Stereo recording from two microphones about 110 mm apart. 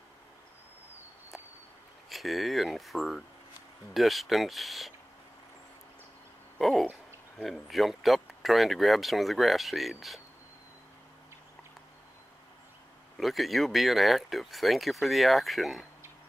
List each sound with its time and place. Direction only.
2.0 s speech: centre (ahead or behind)
6.6 s speech: centre (ahead or behind)
6.9 s a sound: 15° right (ahead or behind)
7.4 s speech: centre (ahead or behind)
13.2 s speech: centre (ahead or behind)